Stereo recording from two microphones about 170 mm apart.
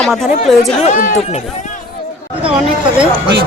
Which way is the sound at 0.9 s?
50° left (ahead or behind).